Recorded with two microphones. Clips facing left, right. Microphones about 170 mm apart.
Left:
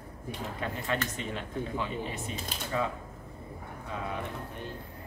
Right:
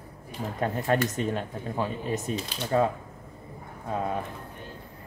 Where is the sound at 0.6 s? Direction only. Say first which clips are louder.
Right 8 dB; 45° right (ahead or behind).